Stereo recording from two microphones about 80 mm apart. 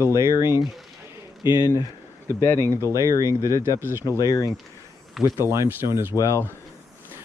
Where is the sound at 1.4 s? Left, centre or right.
Left.